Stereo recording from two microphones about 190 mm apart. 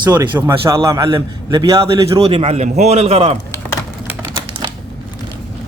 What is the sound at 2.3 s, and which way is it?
A man's voice, 30° right (ahead or behind).